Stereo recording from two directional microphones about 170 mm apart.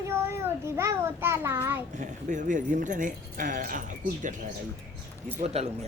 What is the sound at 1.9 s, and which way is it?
Speech, 45° right (ahead or behind).